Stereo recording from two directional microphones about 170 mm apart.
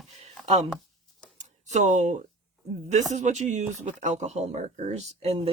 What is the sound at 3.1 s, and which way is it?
Speech, 45° right (ahead or behind).